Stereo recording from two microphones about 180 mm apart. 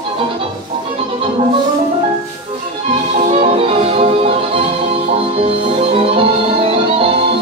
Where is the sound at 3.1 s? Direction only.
35° right (ahead or behind).